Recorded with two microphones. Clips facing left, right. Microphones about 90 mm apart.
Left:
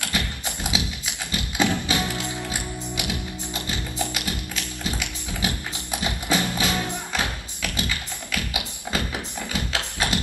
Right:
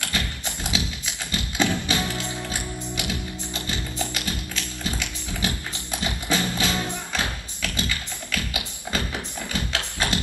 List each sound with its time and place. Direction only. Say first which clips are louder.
0.0 s clip-clop: left 1 dB; 15° left (ahead or behind)
1.3 s music: left 1 dB; 15° left (ahead or behind)
9.5 s clip-clop: even; 20° left (ahead or behind)